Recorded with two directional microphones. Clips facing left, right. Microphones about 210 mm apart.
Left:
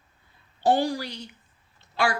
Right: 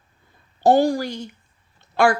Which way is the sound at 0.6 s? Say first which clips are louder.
Right 7 dB; 45° right (ahead or behind).